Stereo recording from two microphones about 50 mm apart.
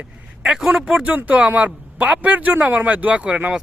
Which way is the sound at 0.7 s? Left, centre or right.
Centre.